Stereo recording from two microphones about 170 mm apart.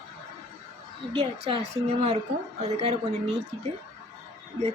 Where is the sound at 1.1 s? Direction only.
35° right (ahead or behind).